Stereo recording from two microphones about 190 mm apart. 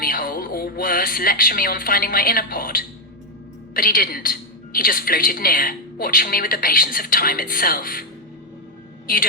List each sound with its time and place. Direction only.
0.0 s a woman's voice: 50° left (ahead or behind)